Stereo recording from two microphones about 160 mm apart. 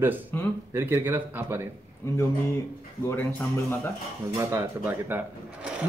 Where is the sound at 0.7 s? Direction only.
15° right (ahead or behind).